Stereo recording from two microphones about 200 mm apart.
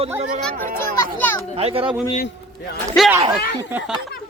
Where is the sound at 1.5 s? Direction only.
30° right (ahead or behind).